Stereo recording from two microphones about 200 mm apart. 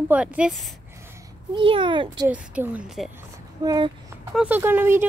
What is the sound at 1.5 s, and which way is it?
Speech, 25° right (ahead or behind).